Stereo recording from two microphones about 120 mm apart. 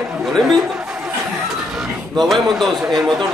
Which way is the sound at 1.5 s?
Centre (ahead or behind).